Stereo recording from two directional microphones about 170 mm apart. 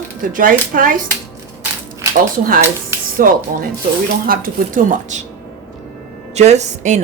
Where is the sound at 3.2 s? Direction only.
55° right (ahead or behind).